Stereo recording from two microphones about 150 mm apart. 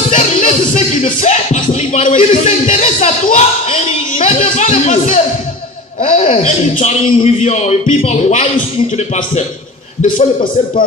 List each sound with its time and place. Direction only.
0.1 s music: 55° left (ahead or behind)
6.0 s a man's voice: 45° left (ahead or behind)